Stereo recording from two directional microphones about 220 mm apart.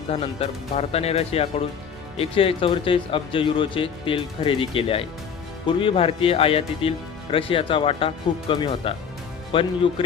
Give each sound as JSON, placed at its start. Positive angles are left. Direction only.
{"t": 0.1, "sound": "speech", "side_deg": 25}